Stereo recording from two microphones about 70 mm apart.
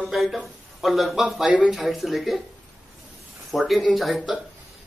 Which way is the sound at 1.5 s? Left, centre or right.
Centre.